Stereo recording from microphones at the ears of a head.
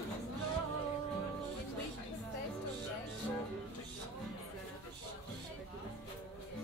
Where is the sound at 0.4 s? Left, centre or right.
Right.